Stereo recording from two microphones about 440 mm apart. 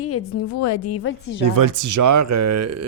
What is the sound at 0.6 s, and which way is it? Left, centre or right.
Speech, left.